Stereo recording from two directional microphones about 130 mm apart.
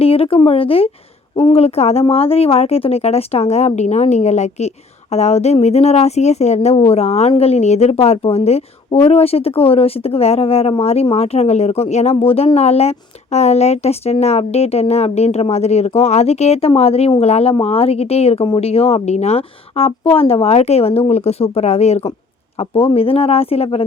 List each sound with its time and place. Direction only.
0.0 s a woman's voice: 50° left (ahead or behind)
22.5 s speech: 45° left (ahead or behind)